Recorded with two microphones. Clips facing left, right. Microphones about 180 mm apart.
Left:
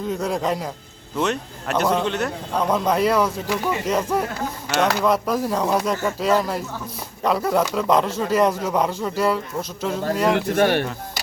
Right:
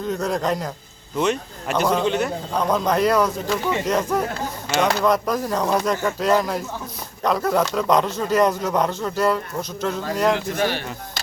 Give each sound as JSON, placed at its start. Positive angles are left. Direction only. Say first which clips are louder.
{"t": 0.1, "sound": "a man's voice", "louder": "right 1 dB", "side_deg": 10}
{"t": 10.3, "sound": "speech", "louder": "left 5 dB", "side_deg": 55}